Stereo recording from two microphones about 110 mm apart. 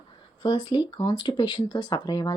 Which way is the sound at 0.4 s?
40° left (ahead or behind).